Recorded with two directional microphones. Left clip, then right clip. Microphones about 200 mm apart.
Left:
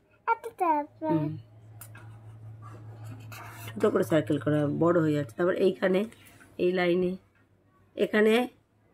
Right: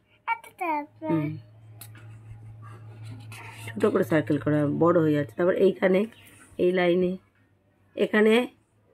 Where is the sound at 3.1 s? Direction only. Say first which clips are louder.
Right 1 dB; centre (ahead or behind).